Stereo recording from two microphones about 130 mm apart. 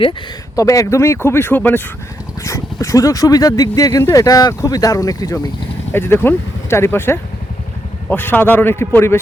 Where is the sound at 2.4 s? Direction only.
25° left (ahead or behind).